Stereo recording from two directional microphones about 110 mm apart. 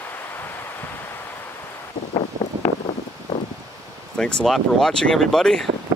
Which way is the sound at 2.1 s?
85° left.